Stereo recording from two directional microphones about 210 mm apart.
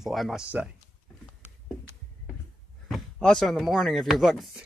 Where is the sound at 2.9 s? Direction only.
Centre (ahead or behind).